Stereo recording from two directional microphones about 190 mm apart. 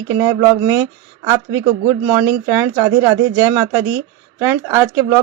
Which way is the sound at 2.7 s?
10° right (ahead or behind).